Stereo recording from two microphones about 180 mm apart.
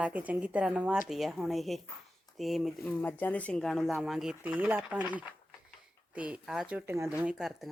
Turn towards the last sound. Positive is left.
turn(degrees=0)  # may be behind; listen again after turning